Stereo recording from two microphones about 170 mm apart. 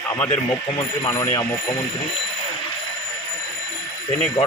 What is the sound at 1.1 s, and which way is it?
Speech, 20° left (ahead or behind).